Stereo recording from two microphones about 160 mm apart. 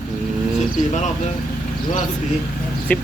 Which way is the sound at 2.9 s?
10° left (ahead or behind).